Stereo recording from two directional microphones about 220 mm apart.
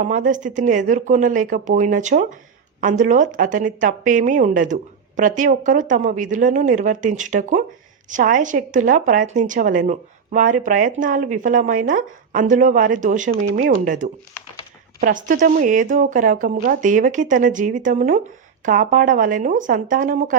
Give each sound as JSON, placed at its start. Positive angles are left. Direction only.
{"t": 0.0, "sound": "speech", "side_deg": -35}